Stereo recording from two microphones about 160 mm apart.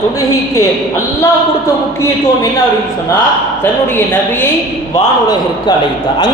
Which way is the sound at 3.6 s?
10° left (ahead or behind).